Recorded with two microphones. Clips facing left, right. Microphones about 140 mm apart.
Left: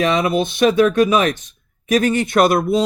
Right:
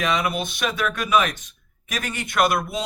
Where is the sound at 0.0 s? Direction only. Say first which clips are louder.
Left 7 dB; 30° left (ahead or behind).